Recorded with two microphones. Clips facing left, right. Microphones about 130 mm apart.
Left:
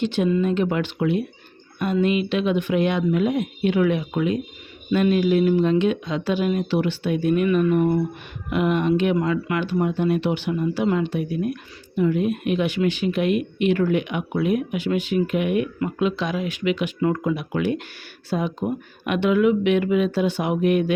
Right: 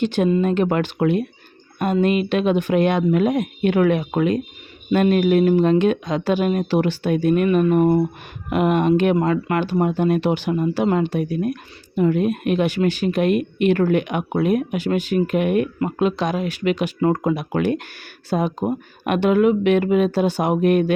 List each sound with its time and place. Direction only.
0.0 s speech: 50° right (ahead or behind)